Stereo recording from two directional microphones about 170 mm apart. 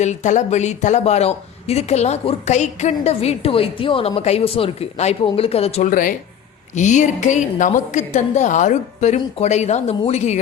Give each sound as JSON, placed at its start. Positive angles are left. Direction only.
{"t": 0.0, "sound": "speech", "side_deg": 45}
{"t": 5.9, "sound": "a woman's voice", "side_deg": 55}